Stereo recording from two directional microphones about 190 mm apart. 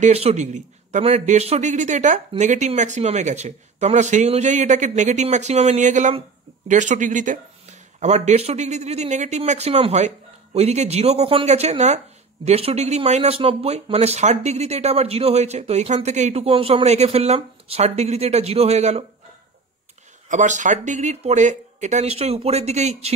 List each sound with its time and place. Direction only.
0.0 s speech: 35° right (ahead or behind)
20.2 s speech: 40° right (ahead or behind)